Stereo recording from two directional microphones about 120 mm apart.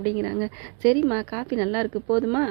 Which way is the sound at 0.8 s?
25° right (ahead or behind).